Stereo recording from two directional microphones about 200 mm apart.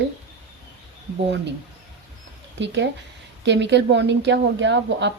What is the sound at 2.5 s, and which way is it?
Speech, 65° right (ahead or behind).